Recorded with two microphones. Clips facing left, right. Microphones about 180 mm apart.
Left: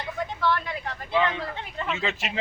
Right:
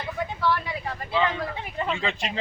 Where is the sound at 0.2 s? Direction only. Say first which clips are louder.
Even; 5° right (ahead or behind).